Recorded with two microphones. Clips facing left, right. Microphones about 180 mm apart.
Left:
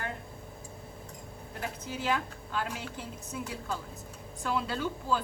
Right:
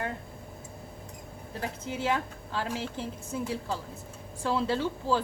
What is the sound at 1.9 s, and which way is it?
Speech, 25° right (ahead or behind).